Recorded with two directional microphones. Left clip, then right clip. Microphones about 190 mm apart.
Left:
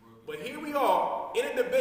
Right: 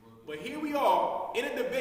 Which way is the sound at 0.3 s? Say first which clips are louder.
Right 1 dB; 15° right (ahead or behind).